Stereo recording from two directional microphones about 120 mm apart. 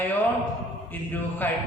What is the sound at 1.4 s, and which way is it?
Speech, 15° left (ahead or behind).